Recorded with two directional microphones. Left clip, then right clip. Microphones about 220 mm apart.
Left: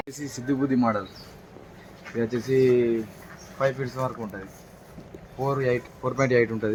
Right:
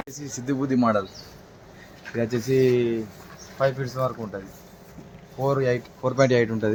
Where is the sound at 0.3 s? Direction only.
50° right (ahead or behind).